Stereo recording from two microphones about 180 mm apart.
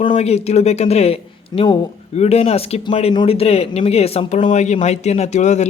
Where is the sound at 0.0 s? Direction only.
30° left (ahead or behind).